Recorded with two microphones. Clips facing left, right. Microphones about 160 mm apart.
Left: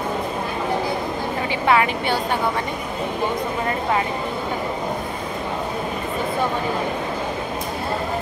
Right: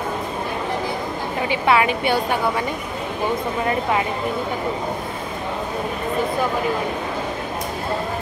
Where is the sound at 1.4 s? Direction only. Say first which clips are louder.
Right 1 dB; 20° right (ahead or behind).